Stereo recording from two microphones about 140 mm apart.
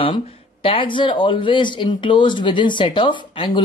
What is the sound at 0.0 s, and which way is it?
Speech, 40° left (ahead or behind).